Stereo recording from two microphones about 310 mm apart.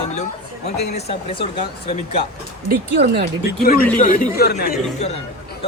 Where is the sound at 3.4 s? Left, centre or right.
Left.